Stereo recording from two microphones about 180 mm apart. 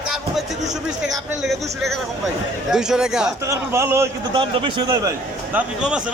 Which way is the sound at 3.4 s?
15° right (ahead or behind).